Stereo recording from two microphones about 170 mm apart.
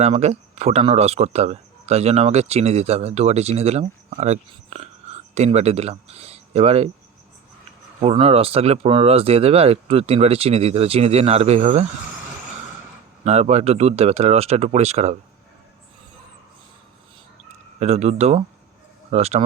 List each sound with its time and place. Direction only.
0.0 s speech: 40° right (ahead or behind)
8.0 s speech: 35° right (ahead or behind)
13.2 s speech: 40° right (ahead or behind)
17.7 s speech: 40° right (ahead or behind)